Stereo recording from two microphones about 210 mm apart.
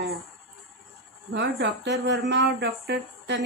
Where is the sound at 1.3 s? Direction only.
55° right (ahead or behind).